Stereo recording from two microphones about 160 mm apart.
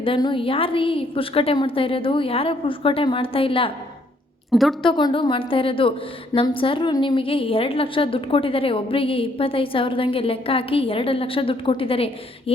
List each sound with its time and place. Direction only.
0.0 s a woman's voice: 30° left (ahead or behind)
4.8 s a woman's voice: 30° left (ahead or behind)